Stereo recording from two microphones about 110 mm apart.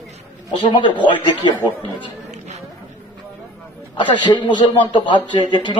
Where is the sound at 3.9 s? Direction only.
45° left (ahead or behind).